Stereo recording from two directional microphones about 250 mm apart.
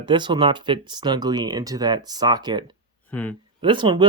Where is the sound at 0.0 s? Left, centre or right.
Centre.